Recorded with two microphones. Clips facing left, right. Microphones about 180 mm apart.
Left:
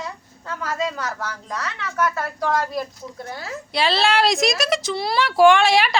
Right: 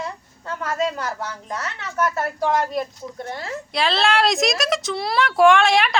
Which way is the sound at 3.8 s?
Centre (ahead or behind).